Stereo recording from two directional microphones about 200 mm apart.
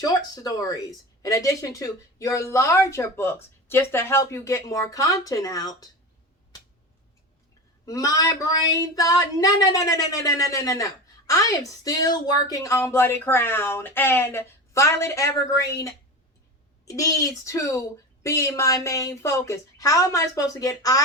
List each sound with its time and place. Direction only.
0.0 s speech: 20° left (ahead or behind)
7.9 s speech: 20° left (ahead or behind)